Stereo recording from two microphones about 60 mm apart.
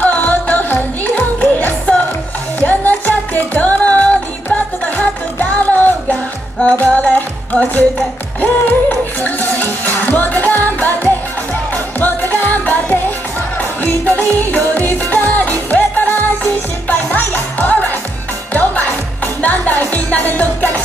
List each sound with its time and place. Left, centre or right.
0.0 s music: left
12.3 s music: left